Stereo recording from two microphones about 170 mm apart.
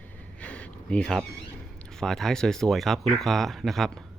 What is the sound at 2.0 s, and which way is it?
Speech, centre (ahead or behind).